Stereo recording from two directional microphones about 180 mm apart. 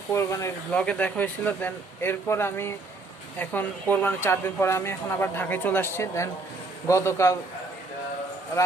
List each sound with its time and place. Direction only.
0.1 s speech: 15° left (ahead or behind)